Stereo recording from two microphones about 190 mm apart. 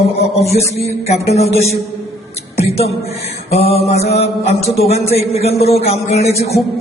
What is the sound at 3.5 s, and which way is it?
A man's voice, 30° left (ahead or behind).